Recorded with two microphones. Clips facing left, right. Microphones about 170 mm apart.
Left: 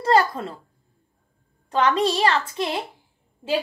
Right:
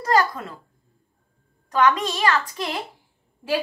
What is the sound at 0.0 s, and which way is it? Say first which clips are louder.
Speech: left 2 dB; 30° left (ahead or behind).